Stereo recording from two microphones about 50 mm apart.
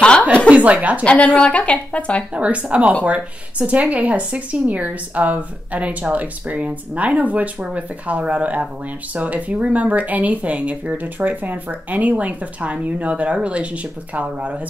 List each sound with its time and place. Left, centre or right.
0.5 s speech: right
1.0 s speech: left
2.3 s speech: right